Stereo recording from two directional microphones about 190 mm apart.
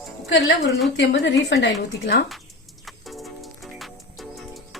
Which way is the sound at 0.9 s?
70° left (ahead or behind).